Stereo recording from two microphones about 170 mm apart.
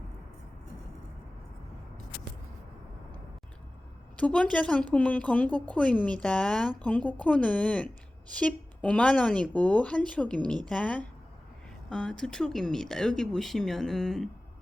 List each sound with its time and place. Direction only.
4.2 s a woman's voice: 5° left (ahead or behind)